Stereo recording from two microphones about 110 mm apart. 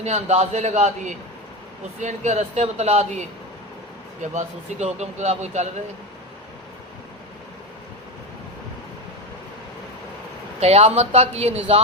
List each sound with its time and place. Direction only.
0.0 s speech: 80° right
4.2 s speech: 90° right
10.6 s speech: 70° right (ahead or behind)